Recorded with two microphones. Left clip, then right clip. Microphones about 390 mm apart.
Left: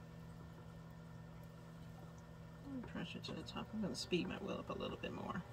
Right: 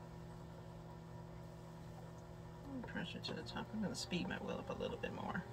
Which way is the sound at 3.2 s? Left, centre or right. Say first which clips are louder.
Right 2 dB; right.